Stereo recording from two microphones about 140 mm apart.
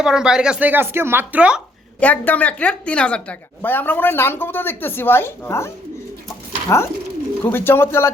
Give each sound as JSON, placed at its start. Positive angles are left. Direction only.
{"t": 0.0, "sound": "speech", "side_deg": -5}
{"t": 2.0, "sound": "speech", "side_deg": 10}